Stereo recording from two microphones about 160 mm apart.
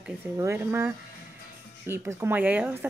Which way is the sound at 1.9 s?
15° right (ahead or behind).